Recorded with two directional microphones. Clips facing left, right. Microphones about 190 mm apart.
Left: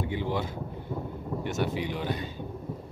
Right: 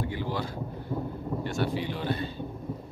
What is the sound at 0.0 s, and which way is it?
Speech, 20° left (ahead or behind).